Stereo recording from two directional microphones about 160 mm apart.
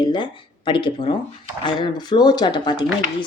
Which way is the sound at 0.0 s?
30° left (ahead or behind).